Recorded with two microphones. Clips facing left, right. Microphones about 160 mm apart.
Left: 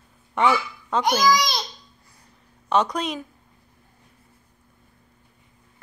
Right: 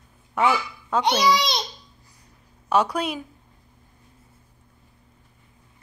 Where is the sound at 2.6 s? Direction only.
10° right (ahead or behind).